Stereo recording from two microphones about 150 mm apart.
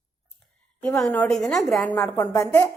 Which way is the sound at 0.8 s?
5° left (ahead or behind).